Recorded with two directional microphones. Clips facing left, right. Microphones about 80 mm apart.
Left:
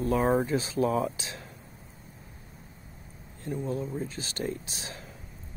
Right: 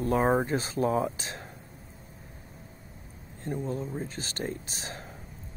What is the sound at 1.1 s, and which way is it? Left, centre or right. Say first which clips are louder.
Speech: right 2 dB; right.